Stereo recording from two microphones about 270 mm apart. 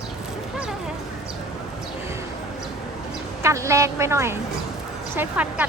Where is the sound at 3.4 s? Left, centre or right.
Centre.